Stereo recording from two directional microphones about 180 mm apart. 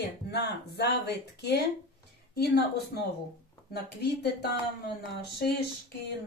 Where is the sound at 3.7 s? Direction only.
65° left (ahead or behind).